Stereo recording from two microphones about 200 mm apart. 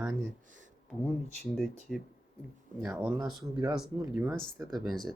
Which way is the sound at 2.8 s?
10° right (ahead or behind).